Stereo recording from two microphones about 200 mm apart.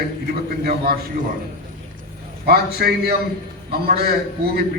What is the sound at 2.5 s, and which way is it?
A man's voice, 50° right (ahead or behind).